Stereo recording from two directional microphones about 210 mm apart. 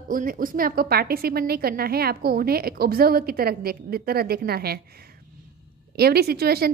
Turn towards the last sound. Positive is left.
turn(degrees=-45)  # may be behind; listen again after turning